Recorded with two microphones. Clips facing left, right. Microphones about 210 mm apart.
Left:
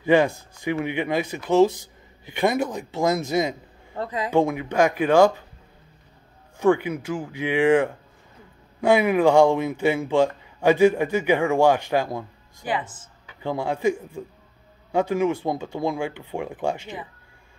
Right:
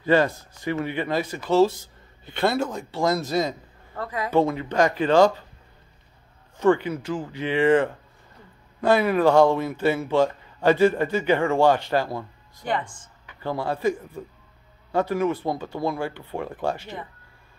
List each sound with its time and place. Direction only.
0.0 s speech: 15° left (ahead or behind)
6.6 s speech: 10° left (ahead or behind)